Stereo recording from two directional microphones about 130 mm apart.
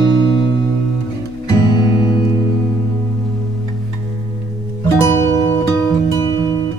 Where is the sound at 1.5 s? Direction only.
30° left (ahead or behind).